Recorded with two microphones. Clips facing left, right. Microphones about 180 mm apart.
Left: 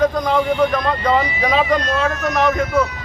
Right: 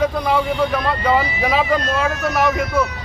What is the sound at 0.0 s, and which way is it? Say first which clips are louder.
Speech: left 2 dB; 10° right (ahead or behind).